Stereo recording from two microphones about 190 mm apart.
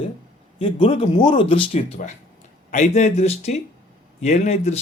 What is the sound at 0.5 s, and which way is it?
Speech, 25° left (ahead or behind).